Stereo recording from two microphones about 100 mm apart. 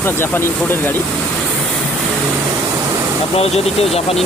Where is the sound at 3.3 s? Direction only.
85° left.